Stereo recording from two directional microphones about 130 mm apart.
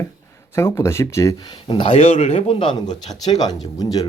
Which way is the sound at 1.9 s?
60° left (ahead or behind).